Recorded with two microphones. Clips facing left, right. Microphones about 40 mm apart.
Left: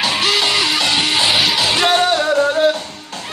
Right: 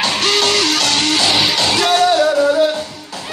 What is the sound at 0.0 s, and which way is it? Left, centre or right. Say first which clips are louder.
Music: right 1 dB; centre.